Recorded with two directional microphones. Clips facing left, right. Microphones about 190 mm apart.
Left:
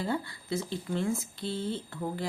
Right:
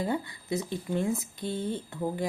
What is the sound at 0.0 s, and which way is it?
Speech, 15° right (ahead or behind).